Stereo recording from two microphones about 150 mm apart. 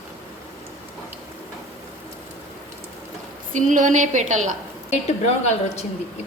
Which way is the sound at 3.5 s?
60° right (ahead or behind).